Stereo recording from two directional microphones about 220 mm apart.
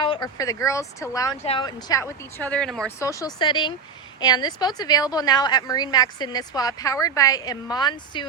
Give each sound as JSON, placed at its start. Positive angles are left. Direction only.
{"t": 0.0, "sound": "a woman's voice", "side_deg": 20}
{"t": 3.0, "sound": "a woman's voice", "side_deg": 15}